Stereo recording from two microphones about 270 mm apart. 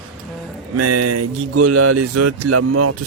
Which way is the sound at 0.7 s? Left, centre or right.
Right.